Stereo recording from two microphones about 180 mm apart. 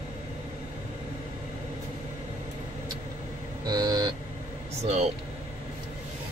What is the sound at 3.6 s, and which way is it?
Speech, 20° right (ahead or behind).